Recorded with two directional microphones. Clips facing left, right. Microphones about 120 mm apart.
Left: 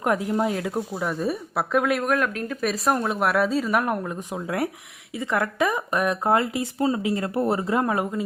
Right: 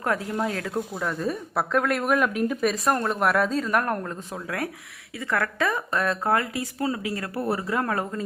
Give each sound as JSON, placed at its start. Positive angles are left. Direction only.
{"t": 0.0, "sound": "speech", "side_deg": 20}